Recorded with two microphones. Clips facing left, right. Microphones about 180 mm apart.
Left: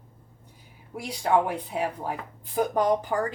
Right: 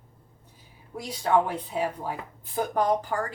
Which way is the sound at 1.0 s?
10° left (ahead or behind).